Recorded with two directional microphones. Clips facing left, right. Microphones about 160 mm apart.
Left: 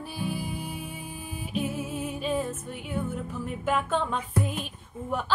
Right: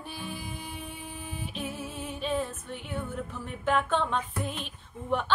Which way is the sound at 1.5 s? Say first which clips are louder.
Left 9 dB; 10° left (ahead or behind).